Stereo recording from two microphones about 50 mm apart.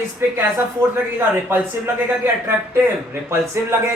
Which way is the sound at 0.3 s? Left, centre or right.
Right.